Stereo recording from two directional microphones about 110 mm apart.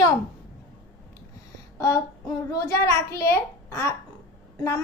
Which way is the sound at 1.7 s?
25° left (ahead or behind).